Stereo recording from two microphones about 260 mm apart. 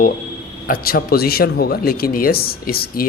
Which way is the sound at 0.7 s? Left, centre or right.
Left.